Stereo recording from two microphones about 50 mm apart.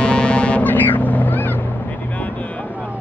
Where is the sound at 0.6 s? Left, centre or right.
Left.